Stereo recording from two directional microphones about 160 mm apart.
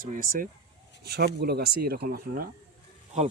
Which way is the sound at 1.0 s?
90° right.